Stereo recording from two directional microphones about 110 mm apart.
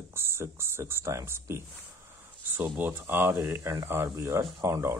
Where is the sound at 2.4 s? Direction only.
15° right (ahead or behind).